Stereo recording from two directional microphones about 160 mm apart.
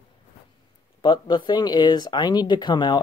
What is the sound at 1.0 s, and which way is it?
Speech, 30° left (ahead or behind).